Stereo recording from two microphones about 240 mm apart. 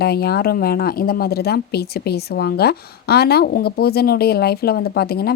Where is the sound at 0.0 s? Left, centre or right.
Left.